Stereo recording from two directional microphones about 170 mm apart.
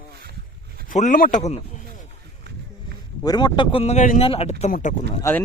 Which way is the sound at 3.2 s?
25° left (ahead or behind).